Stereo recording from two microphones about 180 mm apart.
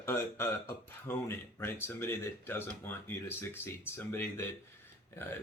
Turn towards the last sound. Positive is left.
turn(degrees=15)  # may be behind; listen again after turning